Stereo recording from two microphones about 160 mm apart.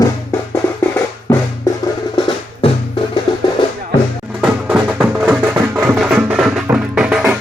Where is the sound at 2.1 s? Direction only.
30° left (ahead or behind).